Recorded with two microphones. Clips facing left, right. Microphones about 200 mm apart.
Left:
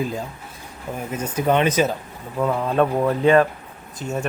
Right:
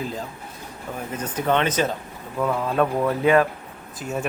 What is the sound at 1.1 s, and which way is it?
Speech, 10° left (ahead or behind).